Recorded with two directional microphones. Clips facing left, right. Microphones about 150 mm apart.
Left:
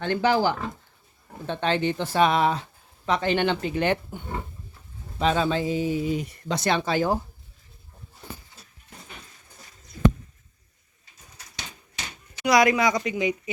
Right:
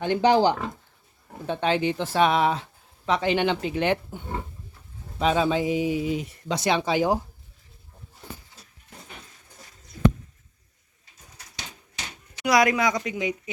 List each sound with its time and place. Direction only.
0.0 s speech: 20° right (ahead or behind)
1.5 s speech: 5° right (ahead or behind)
5.2 s speech: 5° right (ahead or behind)
12.5 s speech: centre (ahead or behind)